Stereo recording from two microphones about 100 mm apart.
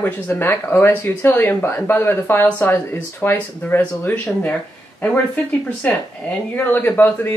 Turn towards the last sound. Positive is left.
turn(degrees=20)  # may be behind; listen again after turning